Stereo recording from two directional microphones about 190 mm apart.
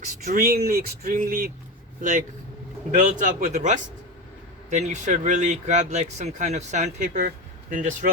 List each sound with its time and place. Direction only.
0.0 s speech: 45° right (ahead or behind)